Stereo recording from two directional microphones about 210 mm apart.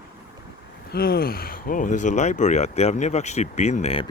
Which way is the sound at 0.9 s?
45° left (ahead or behind).